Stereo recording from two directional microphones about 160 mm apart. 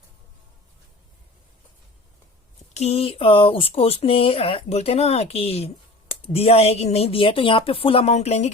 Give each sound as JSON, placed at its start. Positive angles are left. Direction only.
{"t": 2.7, "sound": "speech", "side_deg": 40}